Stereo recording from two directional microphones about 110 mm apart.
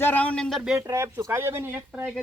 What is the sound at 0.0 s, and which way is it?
Speech, 15° left (ahead or behind).